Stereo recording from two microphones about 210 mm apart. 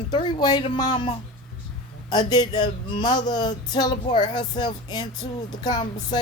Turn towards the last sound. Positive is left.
turn(degrees=20)  # may be behind; listen again after turning